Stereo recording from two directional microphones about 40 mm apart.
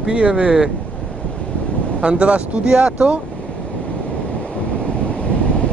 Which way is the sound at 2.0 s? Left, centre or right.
Right.